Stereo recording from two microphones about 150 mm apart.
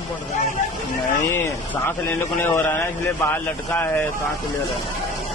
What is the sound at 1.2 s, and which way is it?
A man's voice, 15° left (ahead or behind).